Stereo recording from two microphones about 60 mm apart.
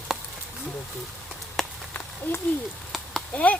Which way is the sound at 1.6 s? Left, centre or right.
Centre.